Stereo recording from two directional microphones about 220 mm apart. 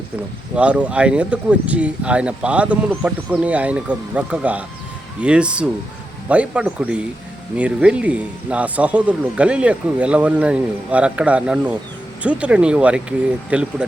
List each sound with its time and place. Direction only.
0.5 s speech: 5° right (ahead or behind)